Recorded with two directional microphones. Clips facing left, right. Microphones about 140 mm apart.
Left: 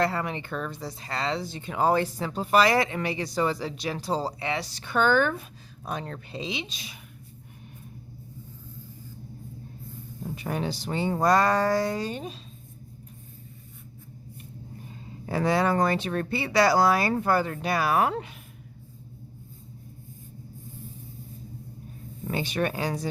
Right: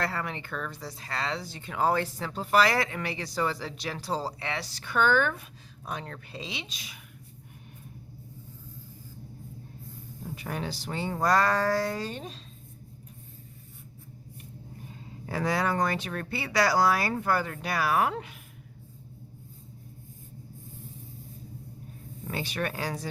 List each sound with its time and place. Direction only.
0.0 s speech: 20° left (ahead or behind); by 6.1 s 35° left (ahead or behind)
6.3 s speech: 20° left (ahead or behind)
10.3 s speech: 25° left (ahead or behind); by 12.4 s 5° left (ahead or behind)
15.3 s speech: 25° left (ahead or behind)
22.3 s speech: 20° left (ahead or behind)